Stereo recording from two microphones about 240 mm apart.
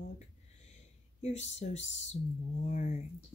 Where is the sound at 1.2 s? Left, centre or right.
Left.